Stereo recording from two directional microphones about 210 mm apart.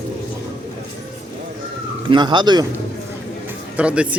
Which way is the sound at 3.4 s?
5° right (ahead or behind).